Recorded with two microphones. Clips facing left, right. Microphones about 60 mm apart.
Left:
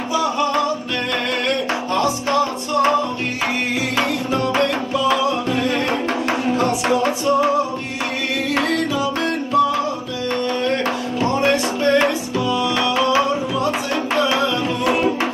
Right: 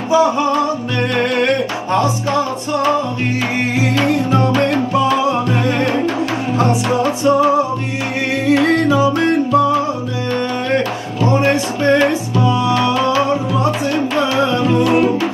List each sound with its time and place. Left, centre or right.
0.1 s music: right
4.0 s music: right
8.6 s music: right
10.7 s music: right